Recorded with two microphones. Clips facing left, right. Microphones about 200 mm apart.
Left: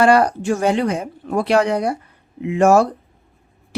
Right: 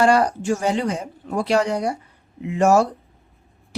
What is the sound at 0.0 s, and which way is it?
Speech, 60° left (ahead or behind).